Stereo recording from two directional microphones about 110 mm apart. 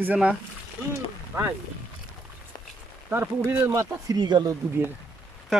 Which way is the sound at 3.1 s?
20° right (ahead or behind).